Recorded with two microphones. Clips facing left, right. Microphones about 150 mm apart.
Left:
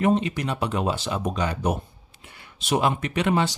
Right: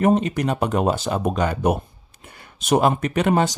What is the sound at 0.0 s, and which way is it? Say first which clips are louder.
Speech: right 4 dB; 45° right (ahead or behind).